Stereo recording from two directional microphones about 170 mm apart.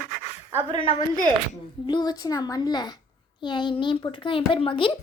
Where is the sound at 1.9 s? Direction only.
25° left (ahead or behind).